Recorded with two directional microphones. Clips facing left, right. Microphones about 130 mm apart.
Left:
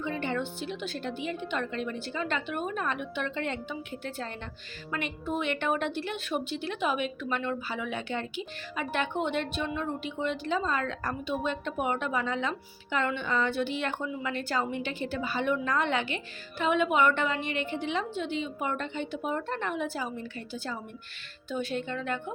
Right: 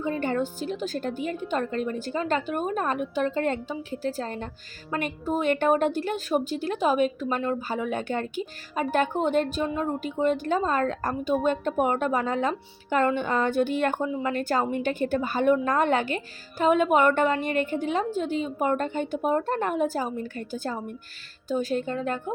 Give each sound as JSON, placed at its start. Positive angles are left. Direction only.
{"t": 0.0, "sound": "a woman's voice", "side_deg": -45}